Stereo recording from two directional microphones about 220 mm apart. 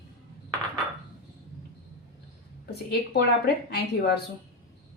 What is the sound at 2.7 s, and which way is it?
A woman's voice, 45° left (ahead or behind).